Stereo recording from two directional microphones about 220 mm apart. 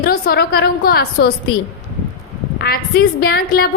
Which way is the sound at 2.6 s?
45° left (ahead or behind).